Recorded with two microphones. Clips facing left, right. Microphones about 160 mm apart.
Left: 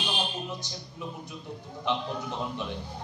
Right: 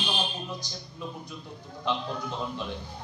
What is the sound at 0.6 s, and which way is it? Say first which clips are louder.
A man's voice: even; 20° left (ahead or behind).